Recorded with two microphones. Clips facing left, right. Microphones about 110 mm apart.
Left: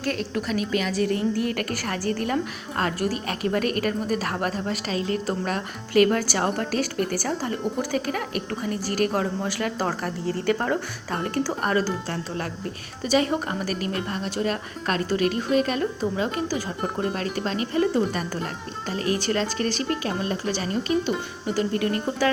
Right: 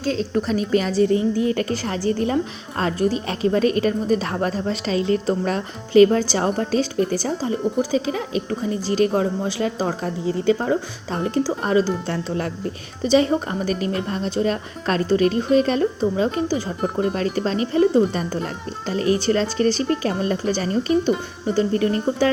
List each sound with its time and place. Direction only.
0.0 s a woman's voice: 70° left (ahead or behind)
0.3 s a woman's voice: 30° right (ahead or behind)
10.2 s a woman's voice: 15° right (ahead or behind); by 22.3 s 30° right (ahead or behind)